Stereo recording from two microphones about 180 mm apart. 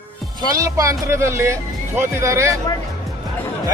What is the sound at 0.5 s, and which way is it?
Speech, 15° right (ahead or behind).